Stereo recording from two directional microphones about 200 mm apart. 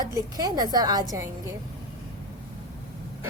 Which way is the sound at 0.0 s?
20° right (ahead or behind).